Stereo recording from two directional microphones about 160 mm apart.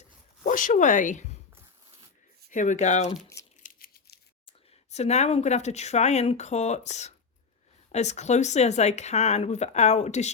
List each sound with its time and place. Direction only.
0.4 s speech: 55° left (ahead or behind)
2.5 s speech: 50° left (ahead or behind)
3.6 s a sound: 70° left (ahead or behind)
4.4 s speech: 45° left (ahead or behind)